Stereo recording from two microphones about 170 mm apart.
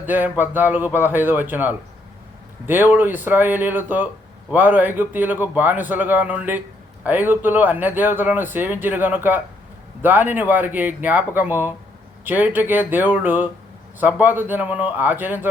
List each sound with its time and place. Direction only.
0.0 s speech: 10° right (ahead or behind)